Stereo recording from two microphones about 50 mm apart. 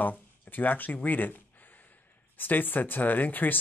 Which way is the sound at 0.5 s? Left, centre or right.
Left.